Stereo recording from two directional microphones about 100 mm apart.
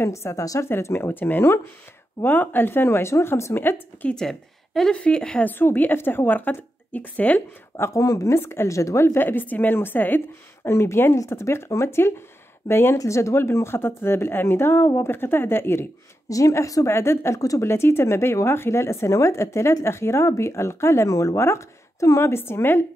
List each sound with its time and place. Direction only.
0.0 s a woman's voice: 30° left (ahead or behind); by 5.5 s 10° left (ahead or behind)
5.5 s a woman's voice: 20° left (ahead or behind)
16.3 s a woman's voice: 35° left (ahead or behind)